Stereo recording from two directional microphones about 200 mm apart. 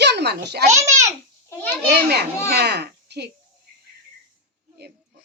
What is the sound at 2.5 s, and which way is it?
Speech, 55° right (ahead or behind).